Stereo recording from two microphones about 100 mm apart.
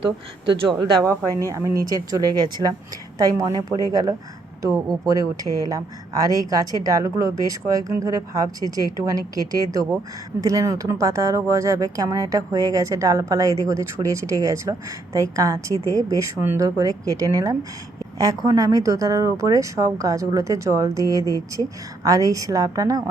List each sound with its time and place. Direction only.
1.0 s speech: 35° right (ahead or behind)